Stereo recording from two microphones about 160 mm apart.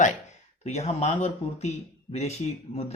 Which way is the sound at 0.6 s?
40° left (ahead or behind).